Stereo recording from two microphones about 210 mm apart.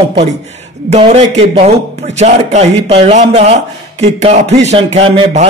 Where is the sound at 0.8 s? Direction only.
30° right (ahead or behind).